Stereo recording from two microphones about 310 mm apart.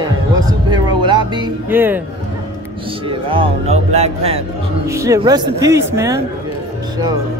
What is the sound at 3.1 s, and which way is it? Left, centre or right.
A man's voice, centre.